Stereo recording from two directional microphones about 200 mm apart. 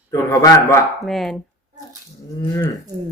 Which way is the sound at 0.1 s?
15° left (ahead or behind).